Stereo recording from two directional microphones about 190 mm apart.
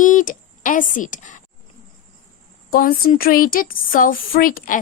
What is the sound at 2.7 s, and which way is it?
Speech, 50° left (ahead or behind).